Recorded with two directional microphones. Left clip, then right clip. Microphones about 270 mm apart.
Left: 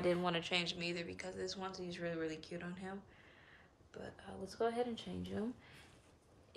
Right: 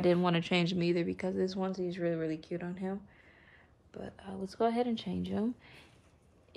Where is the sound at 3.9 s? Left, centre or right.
Right.